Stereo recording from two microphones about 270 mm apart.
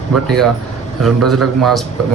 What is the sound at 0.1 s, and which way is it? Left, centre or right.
A man's voice, centre.